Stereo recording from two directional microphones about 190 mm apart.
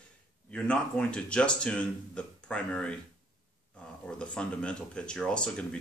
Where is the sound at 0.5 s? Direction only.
5° left (ahead or behind).